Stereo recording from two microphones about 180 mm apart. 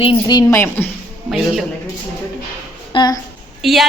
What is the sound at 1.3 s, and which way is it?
Speech, centre (ahead or behind).